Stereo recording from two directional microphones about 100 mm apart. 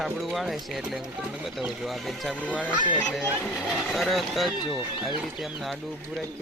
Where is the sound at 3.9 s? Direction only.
Centre (ahead or behind).